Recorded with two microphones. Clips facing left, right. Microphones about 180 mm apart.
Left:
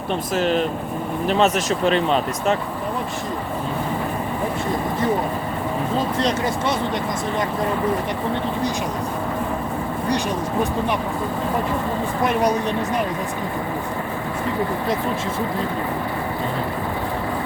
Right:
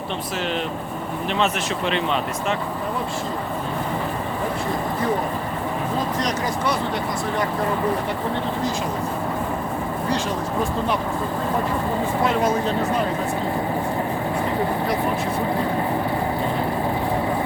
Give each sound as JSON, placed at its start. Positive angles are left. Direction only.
{"t": 0.3, "sound": "speech", "side_deg": 40}
{"t": 6.1, "sound": "speech", "side_deg": 30}
{"t": 12.2, "sound": "speech", "side_deg": 20}